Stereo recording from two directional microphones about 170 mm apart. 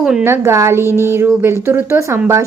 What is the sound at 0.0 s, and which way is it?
Speech, 5° right (ahead or behind).